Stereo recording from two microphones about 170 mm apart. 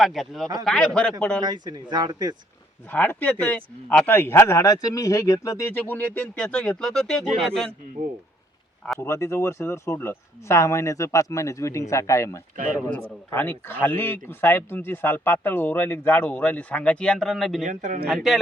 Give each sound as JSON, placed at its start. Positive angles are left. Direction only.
{"t": 0.0, "sound": "speech", "side_deg": 0}
{"t": 1.4, "sound": "speech", "side_deg": -25}
{"t": 2.9, "sound": "speech", "side_deg": 10}
{"t": 9.0, "sound": "speech", "side_deg": 15}
{"t": 17.7, "sound": "speech", "side_deg": -50}
{"t": 18.1, "sound": "speech", "side_deg": 0}